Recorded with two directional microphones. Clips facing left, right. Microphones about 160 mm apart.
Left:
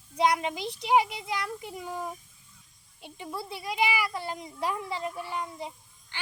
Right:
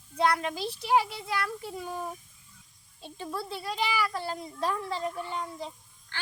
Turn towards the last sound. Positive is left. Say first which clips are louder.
# even
turn(degrees=15)  # may be behind; listen again after turning